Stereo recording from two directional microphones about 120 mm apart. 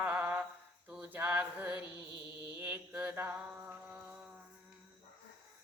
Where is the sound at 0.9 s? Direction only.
15° right (ahead or behind).